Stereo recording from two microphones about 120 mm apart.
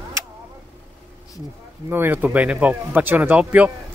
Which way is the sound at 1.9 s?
15° right (ahead or behind).